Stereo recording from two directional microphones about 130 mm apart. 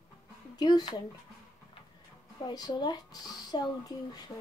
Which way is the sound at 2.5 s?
30° left (ahead or behind).